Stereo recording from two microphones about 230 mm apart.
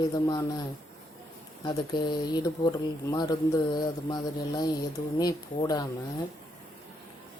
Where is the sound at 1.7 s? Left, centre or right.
Centre.